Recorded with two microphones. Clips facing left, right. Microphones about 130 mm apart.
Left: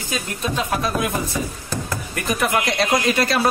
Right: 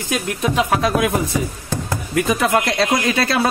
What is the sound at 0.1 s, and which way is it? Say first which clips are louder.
Speech: right 5 dB; 85° right.